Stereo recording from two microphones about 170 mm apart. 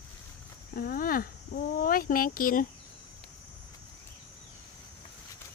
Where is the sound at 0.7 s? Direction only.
55° left (ahead or behind).